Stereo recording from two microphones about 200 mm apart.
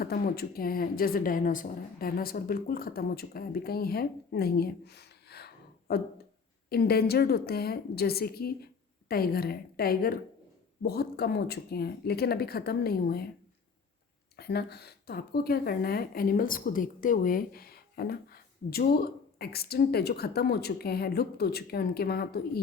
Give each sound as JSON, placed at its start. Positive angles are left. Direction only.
{"t": 0.0, "sound": "a woman's voice", "side_deg": 50}
{"t": 14.3, "sound": "a woman's voice", "side_deg": 50}